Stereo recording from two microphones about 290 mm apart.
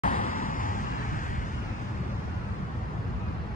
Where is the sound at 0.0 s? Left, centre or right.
Left.